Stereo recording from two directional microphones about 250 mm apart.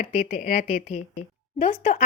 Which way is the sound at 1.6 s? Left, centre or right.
Left.